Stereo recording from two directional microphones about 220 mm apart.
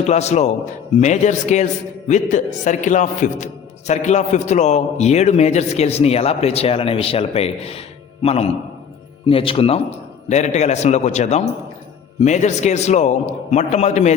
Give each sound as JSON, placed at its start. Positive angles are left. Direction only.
{"t": 0.1, "sound": "a man's voice", "side_deg": 30}